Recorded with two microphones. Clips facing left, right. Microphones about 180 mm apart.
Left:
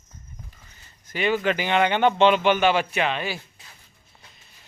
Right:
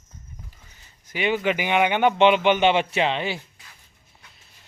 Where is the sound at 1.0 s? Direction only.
10° right (ahead or behind).